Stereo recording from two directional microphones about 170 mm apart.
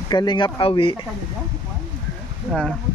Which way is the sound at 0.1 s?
25° left (ahead or behind).